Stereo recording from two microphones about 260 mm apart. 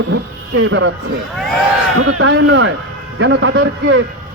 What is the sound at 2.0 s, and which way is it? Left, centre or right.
Speech, right.